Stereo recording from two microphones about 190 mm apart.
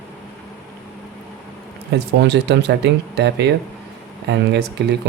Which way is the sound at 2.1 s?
65° right (ahead or behind).